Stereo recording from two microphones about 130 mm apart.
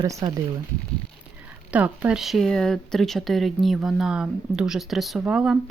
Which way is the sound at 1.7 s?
10° right (ahead or behind).